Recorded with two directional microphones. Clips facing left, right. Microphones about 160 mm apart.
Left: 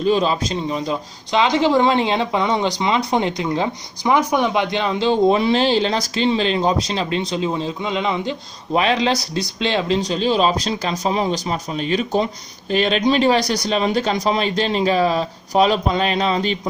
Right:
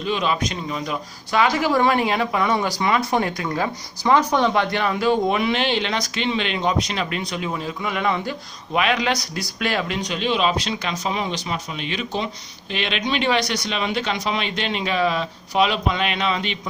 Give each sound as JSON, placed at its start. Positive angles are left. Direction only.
{"t": 0.0, "sound": "speech", "side_deg": 35}
{"t": 8.7, "sound": "speech", "side_deg": 30}